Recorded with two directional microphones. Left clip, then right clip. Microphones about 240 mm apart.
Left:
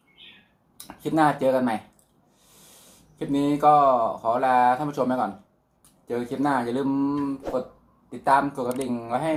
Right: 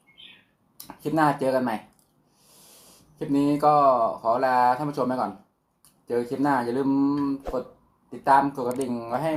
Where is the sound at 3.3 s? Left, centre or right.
Centre.